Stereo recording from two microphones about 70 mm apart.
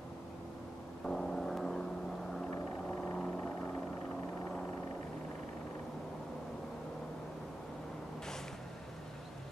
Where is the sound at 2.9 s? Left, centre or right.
Centre.